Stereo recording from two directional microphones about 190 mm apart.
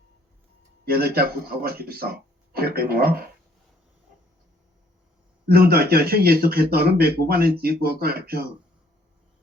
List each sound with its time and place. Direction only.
0.9 s speech: 55° right (ahead or behind)
5.5 s speech: 55° right (ahead or behind)